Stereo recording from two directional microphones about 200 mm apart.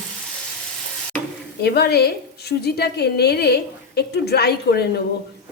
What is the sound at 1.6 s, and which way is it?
A woman's voice, 55° left (ahead or behind).